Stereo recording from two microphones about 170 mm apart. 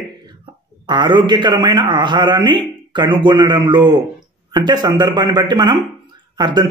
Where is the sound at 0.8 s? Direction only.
25° right (ahead or behind).